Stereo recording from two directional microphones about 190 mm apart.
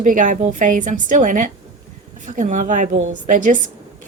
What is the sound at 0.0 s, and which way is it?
A woman's voice, 45° right (ahead or behind).